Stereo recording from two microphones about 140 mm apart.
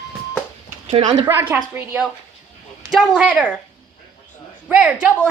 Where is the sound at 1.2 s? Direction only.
15° right (ahead or behind).